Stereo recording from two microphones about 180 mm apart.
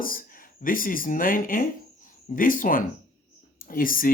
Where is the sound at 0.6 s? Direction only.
50° left (ahead or behind).